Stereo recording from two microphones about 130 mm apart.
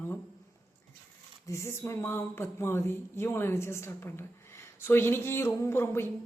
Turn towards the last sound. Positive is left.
turn(degrees=20)  # may be behind; listen again after turning